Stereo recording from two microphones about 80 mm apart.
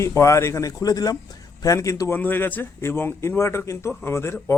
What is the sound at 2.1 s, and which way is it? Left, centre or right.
A man's voice, left.